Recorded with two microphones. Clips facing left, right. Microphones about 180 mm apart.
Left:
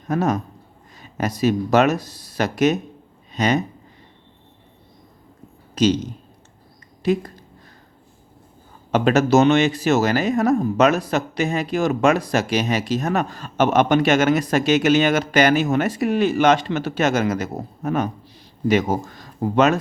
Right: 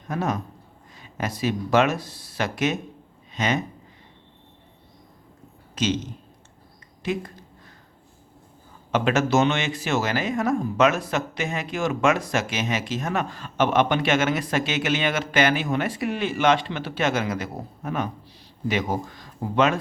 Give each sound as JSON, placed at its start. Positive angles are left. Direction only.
{"t": 0.1, "sound": "speech", "side_deg": 40}
{"t": 5.7, "sound": "speech", "side_deg": 35}
{"t": 8.9, "sound": "speech", "side_deg": 40}